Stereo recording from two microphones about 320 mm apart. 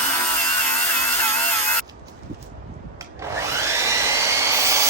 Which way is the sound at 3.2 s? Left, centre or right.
Centre.